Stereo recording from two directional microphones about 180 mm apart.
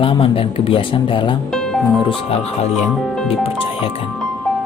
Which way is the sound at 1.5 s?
5° left (ahead or behind).